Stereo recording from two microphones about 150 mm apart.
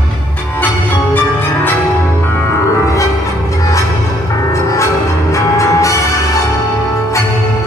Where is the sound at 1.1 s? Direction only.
15° left (ahead or behind).